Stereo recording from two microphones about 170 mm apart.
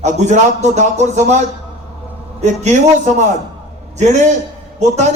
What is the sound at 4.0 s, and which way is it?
Speech, 45° right (ahead or behind).